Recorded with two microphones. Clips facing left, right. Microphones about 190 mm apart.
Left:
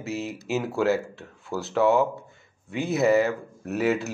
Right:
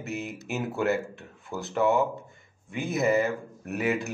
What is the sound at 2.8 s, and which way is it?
Speech, 70° left (ahead or behind).